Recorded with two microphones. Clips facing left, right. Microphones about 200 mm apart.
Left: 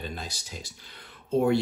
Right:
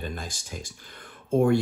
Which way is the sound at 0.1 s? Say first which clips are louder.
Right 2 dB; 50° right (ahead or behind).